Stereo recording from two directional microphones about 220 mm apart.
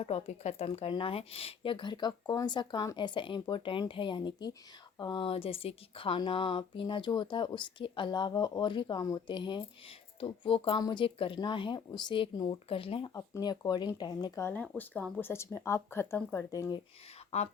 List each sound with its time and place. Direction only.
0.0 s speech: 30° left (ahead or behind)
17.3 s speech: 30° left (ahead or behind)